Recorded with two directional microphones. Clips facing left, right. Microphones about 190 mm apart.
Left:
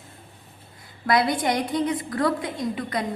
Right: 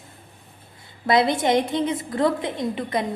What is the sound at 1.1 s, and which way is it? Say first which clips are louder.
A woman's voice: right 3 dB; 25° right (ahead or behind).